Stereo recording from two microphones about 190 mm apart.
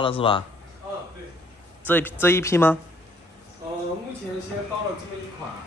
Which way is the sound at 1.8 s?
10° left (ahead or behind).